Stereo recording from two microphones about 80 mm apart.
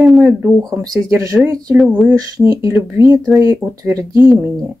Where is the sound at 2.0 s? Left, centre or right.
Right.